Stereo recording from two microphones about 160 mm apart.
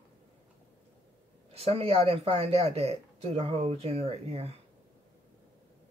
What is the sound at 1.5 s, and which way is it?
Speech, 40° right (ahead or behind).